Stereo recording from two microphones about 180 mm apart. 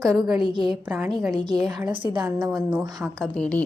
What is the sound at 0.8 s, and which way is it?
Speech, 5° right (ahead or behind).